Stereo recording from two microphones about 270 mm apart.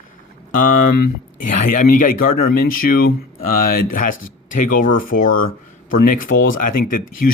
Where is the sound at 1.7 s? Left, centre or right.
Left.